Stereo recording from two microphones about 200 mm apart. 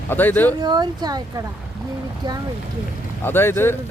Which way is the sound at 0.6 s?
20° right (ahead or behind).